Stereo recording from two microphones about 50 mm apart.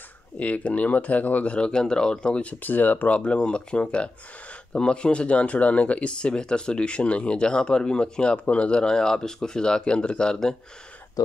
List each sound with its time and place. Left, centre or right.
0.4 s speech: left
2.6 s speech: left
3.2 s speech: left